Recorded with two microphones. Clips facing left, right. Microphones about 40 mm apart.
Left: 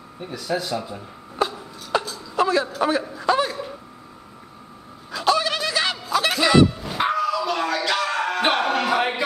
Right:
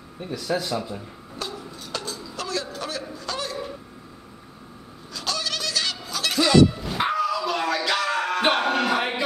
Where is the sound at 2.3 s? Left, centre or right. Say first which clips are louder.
Left 11 dB; left.